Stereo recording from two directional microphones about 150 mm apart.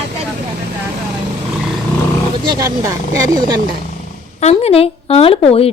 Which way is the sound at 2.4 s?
25° right (ahead or behind).